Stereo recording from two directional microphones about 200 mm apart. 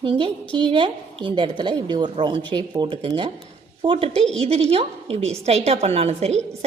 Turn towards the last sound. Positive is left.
turn(degrees=-30)  # may be behind; listen again after turning